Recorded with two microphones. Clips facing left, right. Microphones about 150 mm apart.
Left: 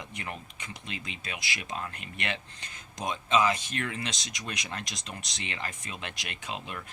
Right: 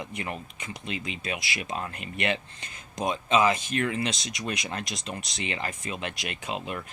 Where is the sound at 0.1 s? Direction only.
5° right (ahead or behind).